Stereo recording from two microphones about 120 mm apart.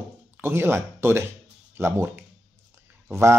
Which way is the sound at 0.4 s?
20° right (ahead or behind).